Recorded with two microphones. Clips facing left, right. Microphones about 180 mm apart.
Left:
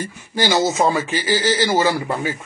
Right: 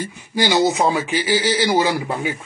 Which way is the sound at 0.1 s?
15° right (ahead or behind).